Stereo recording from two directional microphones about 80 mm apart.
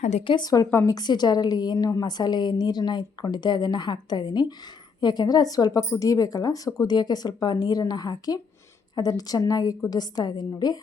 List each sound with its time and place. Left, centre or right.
0.3 s speech: left
0.9 s a woman's voice: left
6.8 s a woman's voice: left